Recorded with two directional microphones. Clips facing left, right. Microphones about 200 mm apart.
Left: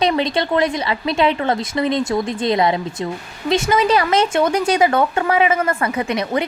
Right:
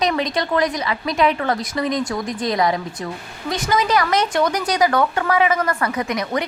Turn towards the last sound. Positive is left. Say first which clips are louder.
# left 2 dB
turn(degrees=25)  # may be behind; listen again after turning